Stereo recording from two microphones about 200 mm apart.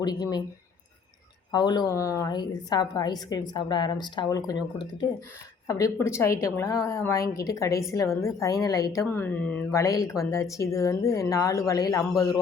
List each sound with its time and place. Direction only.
0.0 s a woman's voice: 20° left (ahead or behind)
1.5 s a woman's voice: 20° left (ahead or behind)